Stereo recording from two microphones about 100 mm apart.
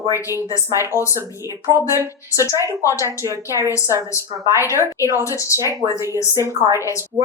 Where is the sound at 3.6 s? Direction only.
30° left (ahead or behind).